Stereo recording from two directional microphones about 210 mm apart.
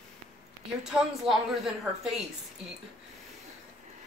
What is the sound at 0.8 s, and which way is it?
Speech, centre (ahead or behind).